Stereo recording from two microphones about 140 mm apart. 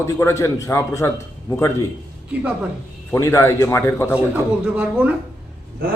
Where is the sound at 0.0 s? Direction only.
20° left (ahead or behind).